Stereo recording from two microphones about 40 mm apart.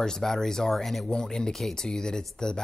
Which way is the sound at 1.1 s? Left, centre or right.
Centre.